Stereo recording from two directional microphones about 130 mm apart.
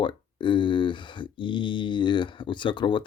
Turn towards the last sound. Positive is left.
turn(degrees=35)  # may be behind; listen again after turning